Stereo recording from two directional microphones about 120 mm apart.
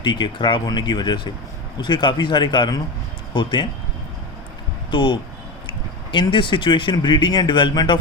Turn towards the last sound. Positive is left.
turn(degrees=40)  # may be behind; listen again after turning